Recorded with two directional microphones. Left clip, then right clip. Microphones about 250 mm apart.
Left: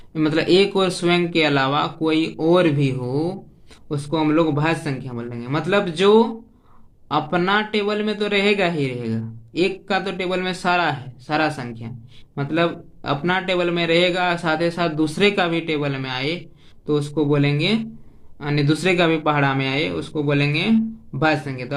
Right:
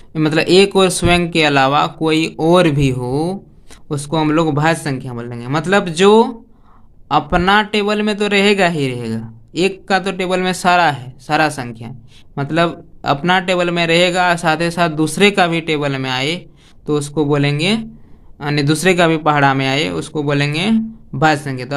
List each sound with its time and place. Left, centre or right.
0.1 s speech: right